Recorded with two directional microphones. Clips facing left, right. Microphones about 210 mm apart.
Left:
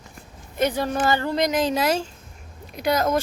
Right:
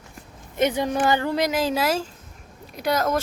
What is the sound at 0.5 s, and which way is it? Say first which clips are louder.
Speech: right 1 dB; 20° right (ahead or behind).